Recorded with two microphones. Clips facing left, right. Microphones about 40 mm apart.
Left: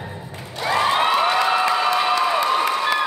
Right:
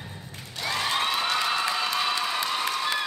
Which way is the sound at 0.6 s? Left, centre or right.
Left.